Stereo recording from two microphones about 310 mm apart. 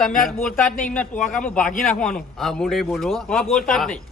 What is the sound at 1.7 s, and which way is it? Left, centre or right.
Speech, left.